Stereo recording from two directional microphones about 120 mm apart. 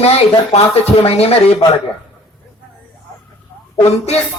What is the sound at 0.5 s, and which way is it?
Speech, 60° left (ahead or behind).